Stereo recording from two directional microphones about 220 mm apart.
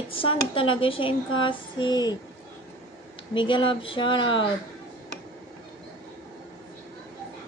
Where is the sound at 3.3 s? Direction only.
20° left (ahead or behind).